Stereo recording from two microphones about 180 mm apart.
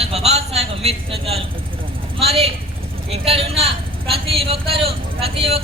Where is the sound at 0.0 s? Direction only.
35° right (ahead or behind).